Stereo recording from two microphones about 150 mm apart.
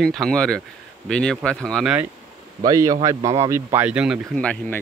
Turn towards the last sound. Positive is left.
turn(degrees=5)  # may be behind; listen again after turning